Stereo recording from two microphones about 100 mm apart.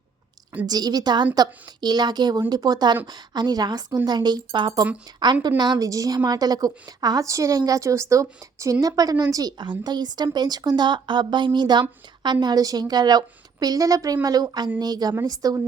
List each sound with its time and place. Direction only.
0.6 s a woman's voice: 40° right (ahead or behind)